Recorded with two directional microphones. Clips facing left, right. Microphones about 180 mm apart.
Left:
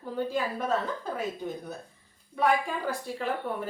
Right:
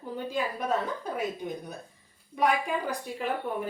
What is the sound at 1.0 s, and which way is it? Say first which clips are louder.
A woman's voice: even; 15° right (ahead or behind).